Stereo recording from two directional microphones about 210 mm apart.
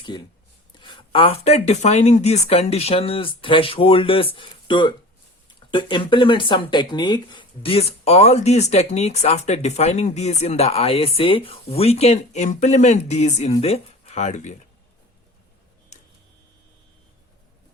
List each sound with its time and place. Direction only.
0.1 s speech: 20° left (ahead or behind)
15.9 s tick-tock: 35° left (ahead or behind)